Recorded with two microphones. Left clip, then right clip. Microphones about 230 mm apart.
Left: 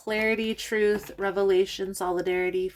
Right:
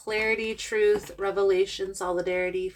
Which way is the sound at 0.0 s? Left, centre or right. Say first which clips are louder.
Even; left.